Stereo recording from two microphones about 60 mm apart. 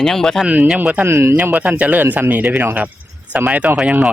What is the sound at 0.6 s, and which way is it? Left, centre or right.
Speech, centre.